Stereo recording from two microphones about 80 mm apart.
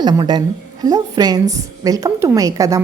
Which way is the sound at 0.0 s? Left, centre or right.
Right.